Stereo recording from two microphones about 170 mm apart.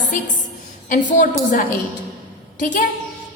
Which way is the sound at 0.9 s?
50° left (ahead or behind).